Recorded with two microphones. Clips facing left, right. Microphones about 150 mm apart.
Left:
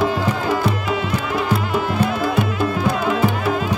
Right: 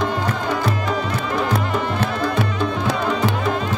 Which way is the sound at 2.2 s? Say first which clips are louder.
Left 2 dB; 5° left (ahead or behind).